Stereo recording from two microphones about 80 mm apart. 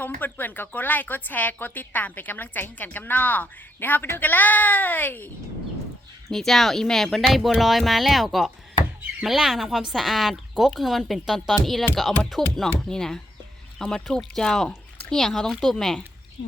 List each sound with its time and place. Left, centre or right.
0.0 s speech: left
6.3 s speech: centre